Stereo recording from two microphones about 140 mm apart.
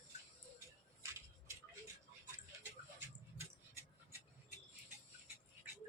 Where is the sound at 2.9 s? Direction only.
20° right (ahead or behind).